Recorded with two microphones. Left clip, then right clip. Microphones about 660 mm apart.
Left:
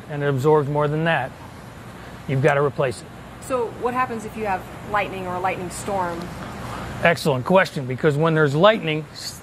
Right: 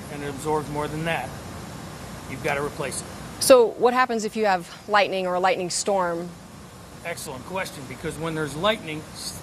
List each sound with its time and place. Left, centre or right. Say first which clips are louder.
0.2 s speech: left 9 dB; left
2.4 s speech: left 8 dB; left
3.4 s speech: right 8 dB; right
7.0 s speech: left 14 dB; left